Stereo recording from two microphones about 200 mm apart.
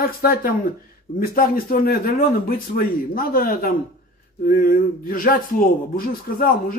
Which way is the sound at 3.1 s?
45° left (ahead or behind).